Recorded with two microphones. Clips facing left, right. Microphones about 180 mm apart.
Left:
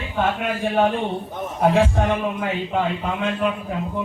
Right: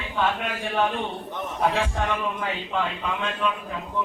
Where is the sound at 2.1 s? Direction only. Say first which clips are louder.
Left 5 dB; 45° left (ahead or behind).